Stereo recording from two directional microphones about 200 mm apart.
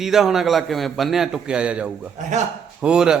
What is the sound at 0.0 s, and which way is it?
A man's voice, centre (ahead or behind).